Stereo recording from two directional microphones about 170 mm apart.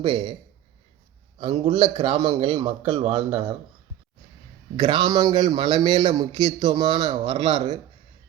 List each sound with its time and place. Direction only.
0.0 s a man's voice: 25° right (ahead or behind)
1.4 s a man's voice: 30° right (ahead or behind)
4.8 s a man's voice: 25° right (ahead or behind)